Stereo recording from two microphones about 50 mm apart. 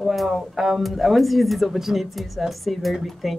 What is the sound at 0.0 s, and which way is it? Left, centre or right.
Speech, centre.